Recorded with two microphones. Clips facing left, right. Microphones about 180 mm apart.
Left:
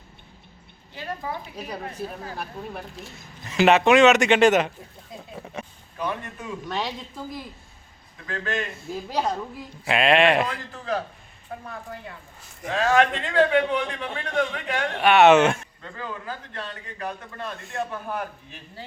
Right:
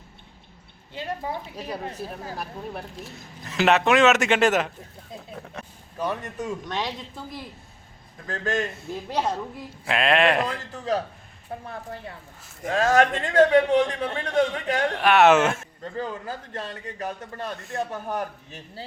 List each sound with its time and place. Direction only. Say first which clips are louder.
1.5 s speech: right 1 dB; centre (ahead or behind)
5.6 s a sound: left 7 dB; centre (ahead or behind)
6.1 s a man's voice: right 3 dB; 40° right (ahead or behind)
6.7 s speech: left 4 dB; centre (ahead or behind)
8.3 s a man's voice: right 2 dB; 40° right (ahead or behind)
8.7 s speech: even; centre (ahead or behind)
11.5 s speech: right 1 dB; 25° right (ahead or behind)
12.6 s a man's voice: right 1 dB; 40° right (ahead or behind)
14.9 s speech: left 2 dB; centre (ahead or behind)
15.8 s a man's voice: right 4 dB; 40° right (ahead or behind)